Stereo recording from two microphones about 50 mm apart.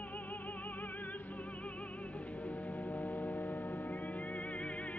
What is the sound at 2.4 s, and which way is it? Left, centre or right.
Music, left.